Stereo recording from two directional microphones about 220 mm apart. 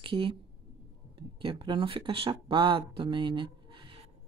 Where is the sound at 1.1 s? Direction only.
25° right (ahead or behind).